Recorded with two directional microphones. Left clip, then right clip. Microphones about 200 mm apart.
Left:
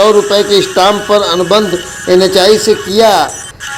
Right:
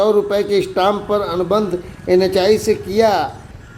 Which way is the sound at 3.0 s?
15° left (ahead or behind).